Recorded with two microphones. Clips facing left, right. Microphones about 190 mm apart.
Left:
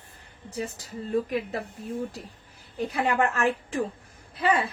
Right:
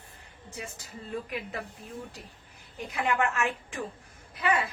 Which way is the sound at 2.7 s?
35° left (ahead or behind).